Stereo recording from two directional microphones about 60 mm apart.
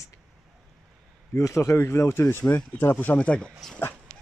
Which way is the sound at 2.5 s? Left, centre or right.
Left.